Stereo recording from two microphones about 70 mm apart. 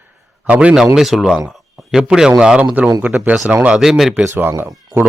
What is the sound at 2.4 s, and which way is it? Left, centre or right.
Speech, centre.